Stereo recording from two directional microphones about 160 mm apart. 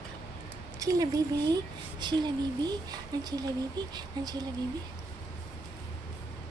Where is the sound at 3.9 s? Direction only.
25° right (ahead or behind).